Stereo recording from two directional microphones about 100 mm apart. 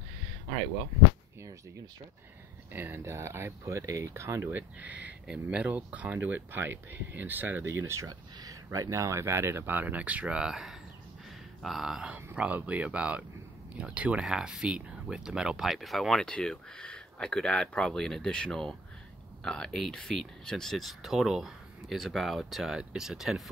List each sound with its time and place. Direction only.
2.7 s speech: 20° right (ahead or behind)
4.5 s speech: 15° right (ahead or behind)
8.1 s speech: 40° right (ahead or behind); by 23.5 s 5° right (ahead or behind)